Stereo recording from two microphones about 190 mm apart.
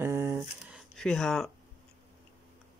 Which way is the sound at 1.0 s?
Centre (ahead or behind).